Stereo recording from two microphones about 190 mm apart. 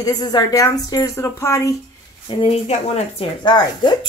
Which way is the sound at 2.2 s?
30° left (ahead or behind).